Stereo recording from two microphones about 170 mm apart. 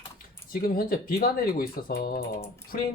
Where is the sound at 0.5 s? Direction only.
60° left (ahead or behind).